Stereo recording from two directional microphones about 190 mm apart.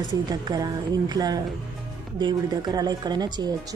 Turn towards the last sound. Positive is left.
turn(degrees=-20)  # may be behind; listen again after turning